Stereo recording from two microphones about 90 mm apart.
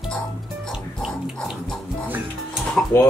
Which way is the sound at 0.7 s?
5° right (ahead or behind).